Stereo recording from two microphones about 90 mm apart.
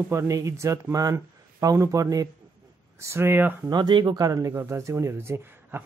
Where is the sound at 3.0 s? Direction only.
25° right (ahead or behind).